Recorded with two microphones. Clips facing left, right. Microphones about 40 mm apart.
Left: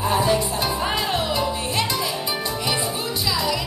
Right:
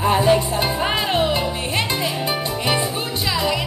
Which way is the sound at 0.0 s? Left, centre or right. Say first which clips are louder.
Right 4 dB; right.